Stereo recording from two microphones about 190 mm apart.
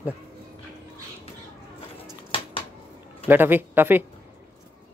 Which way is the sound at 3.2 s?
10° right (ahead or behind).